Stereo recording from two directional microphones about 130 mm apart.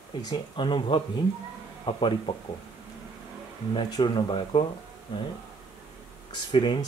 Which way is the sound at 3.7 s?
35° left (ahead or behind).